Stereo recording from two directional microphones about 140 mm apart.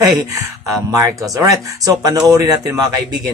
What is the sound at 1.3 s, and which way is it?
A man's voice, 25° right (ahead or behind).